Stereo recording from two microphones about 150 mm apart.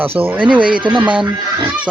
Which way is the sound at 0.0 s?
10° right (ahead or behind).